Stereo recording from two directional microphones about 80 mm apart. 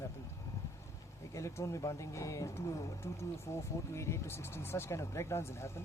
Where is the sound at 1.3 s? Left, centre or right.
Left.